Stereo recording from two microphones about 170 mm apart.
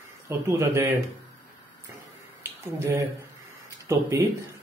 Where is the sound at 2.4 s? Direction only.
15° right (ahead or behind).